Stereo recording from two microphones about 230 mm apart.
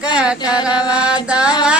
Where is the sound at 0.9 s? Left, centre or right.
Centre.